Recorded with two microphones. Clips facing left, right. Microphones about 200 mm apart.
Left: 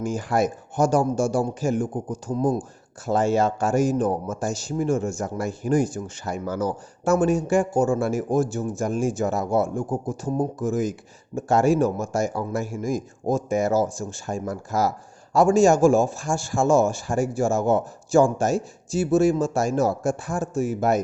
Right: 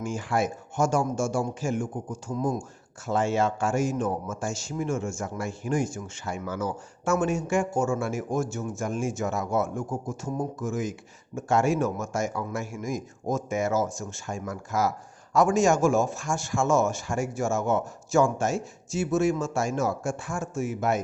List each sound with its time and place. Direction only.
0.0 s speech: 40° left (ahead or behind)